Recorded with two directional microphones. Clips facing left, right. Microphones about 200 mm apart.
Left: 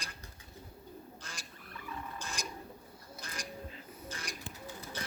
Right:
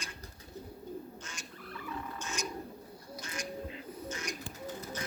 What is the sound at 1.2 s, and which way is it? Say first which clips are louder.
Bird: right 2 dB; 35° left (ahead or behind).